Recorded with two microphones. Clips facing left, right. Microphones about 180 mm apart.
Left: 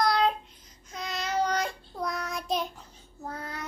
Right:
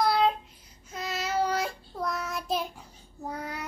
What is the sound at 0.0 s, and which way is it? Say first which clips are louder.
Babbling: right 1 dB; 5° right (ahead or behind).